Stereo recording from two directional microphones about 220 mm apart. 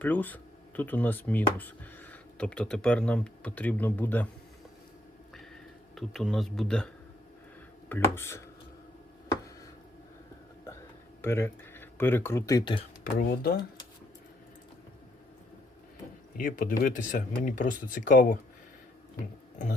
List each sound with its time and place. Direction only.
0.0 s speech: 10° left (ahead or behind)
5.9 s speech: centre (ahead or behind)
11.2 s speech: 10° left (ahead or behind)
13.1 s speech: 40° left (ahead or behind)
16.4 s speech: 40° left (ahead or behind)